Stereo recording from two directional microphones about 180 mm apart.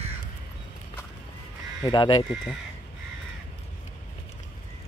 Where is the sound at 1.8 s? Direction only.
25° left (ahead or behind).